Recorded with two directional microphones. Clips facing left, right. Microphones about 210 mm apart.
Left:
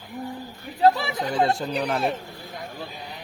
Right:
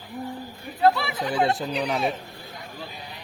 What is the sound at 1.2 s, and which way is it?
Speech, 5° right (ahead or behind).